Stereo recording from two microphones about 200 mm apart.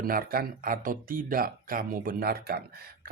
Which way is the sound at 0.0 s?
45° right (ahead or behind).